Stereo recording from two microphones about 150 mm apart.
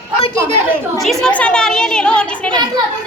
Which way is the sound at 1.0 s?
Centre (ahead or behind).